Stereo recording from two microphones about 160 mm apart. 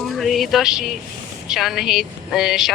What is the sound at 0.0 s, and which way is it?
Speech, centre (ahead or behind).